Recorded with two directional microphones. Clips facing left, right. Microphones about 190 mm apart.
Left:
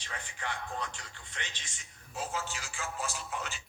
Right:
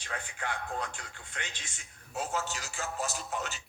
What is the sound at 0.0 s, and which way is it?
A man's voice, 50° right (ahead or behind).